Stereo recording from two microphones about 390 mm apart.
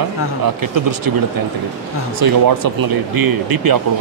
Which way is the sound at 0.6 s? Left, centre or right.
Right.